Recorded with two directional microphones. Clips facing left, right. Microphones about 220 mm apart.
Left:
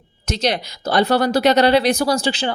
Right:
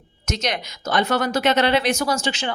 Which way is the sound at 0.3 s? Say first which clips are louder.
Left 5 dB; 35° left (ahead or behind).